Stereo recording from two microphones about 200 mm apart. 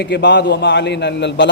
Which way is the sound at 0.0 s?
60° left (ahead or behind).